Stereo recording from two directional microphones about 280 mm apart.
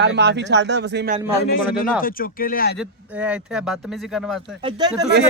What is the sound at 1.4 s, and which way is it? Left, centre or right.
Speech, left.